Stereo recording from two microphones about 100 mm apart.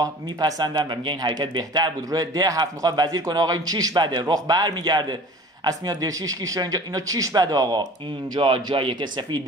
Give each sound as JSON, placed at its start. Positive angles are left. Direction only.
{"t": 0.0, "sound": "speech", "side_deg": -40}
{"t": 8.4, "sound": "speech", "side_deg": -65}